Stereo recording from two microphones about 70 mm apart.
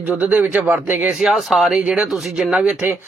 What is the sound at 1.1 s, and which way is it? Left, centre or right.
Speech, centre.